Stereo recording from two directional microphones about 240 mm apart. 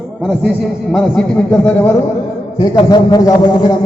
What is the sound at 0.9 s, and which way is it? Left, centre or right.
Speech, centre.